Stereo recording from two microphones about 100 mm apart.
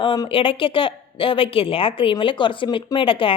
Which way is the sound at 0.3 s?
65° left (ahead or behind).